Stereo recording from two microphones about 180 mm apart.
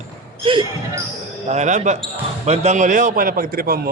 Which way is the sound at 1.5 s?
40° right (ahead or behind).